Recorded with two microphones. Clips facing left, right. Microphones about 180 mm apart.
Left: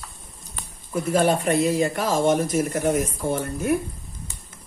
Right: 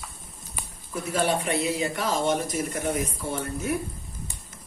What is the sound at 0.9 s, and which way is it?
Speech, 50° left (ahead or behind).